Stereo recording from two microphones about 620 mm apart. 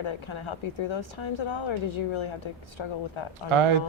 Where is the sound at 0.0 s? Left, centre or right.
Left.